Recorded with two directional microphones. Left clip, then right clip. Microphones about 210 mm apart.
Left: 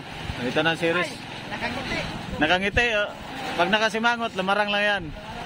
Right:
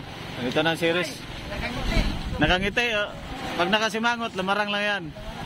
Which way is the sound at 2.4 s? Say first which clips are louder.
Left 1 dB; centre (ahead or behind).